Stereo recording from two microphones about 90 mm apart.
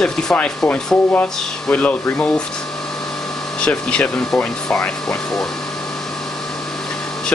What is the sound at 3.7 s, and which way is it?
Speech, 10° left (ahead or behind).